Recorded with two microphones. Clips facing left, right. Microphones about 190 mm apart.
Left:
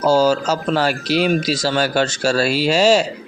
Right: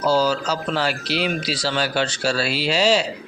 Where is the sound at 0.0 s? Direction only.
45° left (ahead or behind).